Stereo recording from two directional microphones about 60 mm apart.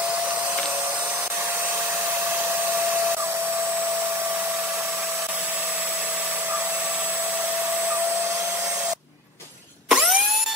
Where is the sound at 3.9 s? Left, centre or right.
Right.